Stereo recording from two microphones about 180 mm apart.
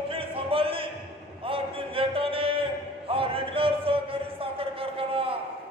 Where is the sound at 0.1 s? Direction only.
30° right (ahead or behind).